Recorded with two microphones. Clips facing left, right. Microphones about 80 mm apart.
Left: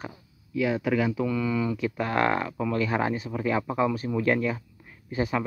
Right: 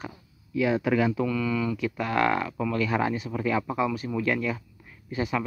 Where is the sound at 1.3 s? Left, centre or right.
Left.